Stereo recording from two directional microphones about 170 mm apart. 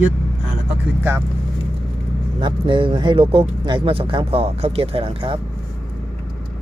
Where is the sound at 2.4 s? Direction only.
30° right (ahead or behind).